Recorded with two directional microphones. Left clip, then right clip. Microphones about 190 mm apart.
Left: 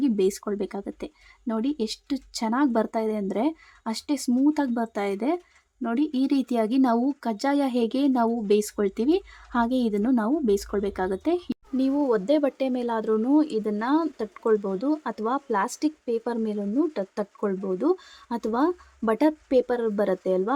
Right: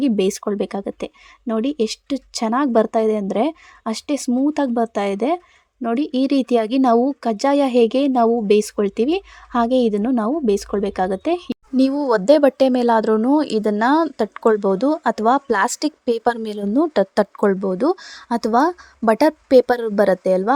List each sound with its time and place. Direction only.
0.0 s speech: 25° right (ahead or behind)
4.3 s speech: 10° right (ahead or behind)
4.5 s speech: 20° right (ahead or behind)
11.8 s speech: 35° right (ahead or behind)